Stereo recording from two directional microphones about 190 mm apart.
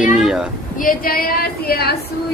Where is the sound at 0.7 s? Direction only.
50° left (ahead or behind).